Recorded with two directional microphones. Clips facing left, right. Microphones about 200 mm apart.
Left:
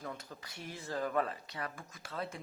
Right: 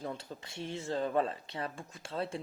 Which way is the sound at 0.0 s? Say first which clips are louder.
Right 4 dB; 30° right (ahead or behind).